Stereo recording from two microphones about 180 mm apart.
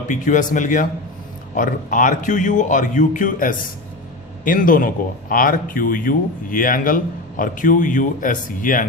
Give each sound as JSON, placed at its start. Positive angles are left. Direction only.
{"t": 0.1, "sound": "speech", "side_deg": 45}